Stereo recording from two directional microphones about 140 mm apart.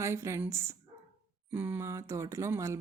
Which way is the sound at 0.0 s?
20° right (ahead or behind).